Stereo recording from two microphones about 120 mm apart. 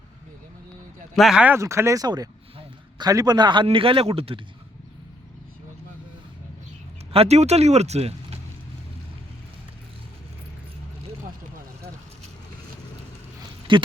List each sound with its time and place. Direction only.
1.1 s speech: centre (ahead or behind)
1.5 s a man's voice: 25° right (ahead or behind); by 4.4 s 50° right (ahead or behind)
7.1 s speech: 60° right (ahead or behind)
13.7 s speech: 40° right (ahead or behind)